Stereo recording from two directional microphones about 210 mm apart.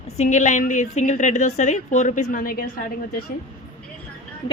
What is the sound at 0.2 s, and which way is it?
A woman's voice, 35° left (ahead or behind).